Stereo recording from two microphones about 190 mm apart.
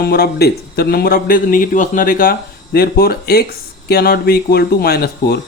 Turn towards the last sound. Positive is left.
turn(degrees=55)  # may be behind; listen again after turning